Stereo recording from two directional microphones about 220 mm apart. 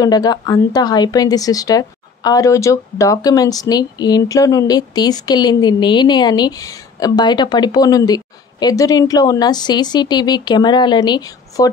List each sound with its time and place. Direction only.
0.0 s speech: 15° left (ahead or behind)